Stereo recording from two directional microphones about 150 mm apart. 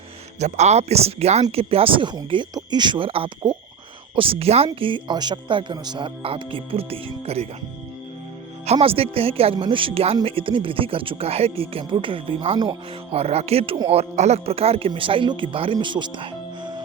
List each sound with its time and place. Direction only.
0.3 s speech: 50° right (ahead or behind)
8.6 s speech: 45° right (ahead or behind)